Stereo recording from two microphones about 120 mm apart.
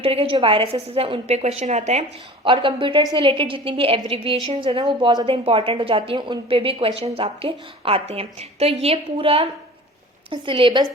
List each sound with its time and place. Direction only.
0.0 s a woman's voice: 50° right (ahead or behind); by 2.0 s 70° right (ahead or behind)
2.4 s a woman's voice: 45° right (ahead or behind)
5.2 s a woman's voice: 55° right (ahead or behind)